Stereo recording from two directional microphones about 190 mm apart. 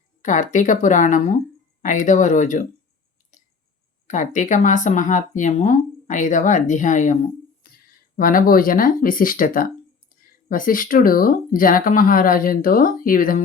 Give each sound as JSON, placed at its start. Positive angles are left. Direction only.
{"t": 0.2, "sound": "speech", "side_deg": 40}
{"t": 4.0, "sound": "speech", "side_deg": 40}